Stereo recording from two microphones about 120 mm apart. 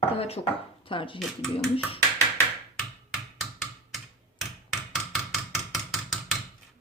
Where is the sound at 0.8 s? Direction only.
45° left (ahead or behind).